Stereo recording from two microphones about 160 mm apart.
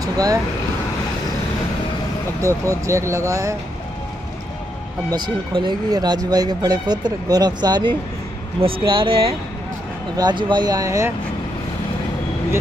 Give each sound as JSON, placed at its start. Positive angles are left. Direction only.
{"t": 0.0, "sound": "vehicle", "side_deg": -20}
{"t": 2.4, "sound": "speech", "side_deg": -20}
{"t": 5.1, "sound": "speech", "side_deg": -30}